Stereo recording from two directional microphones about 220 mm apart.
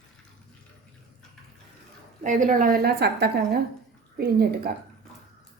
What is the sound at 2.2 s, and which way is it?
A woman's voice, 35° right (ahead or behind).